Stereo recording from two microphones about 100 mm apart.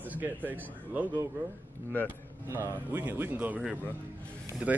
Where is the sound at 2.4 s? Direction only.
25° right (ahead or behind).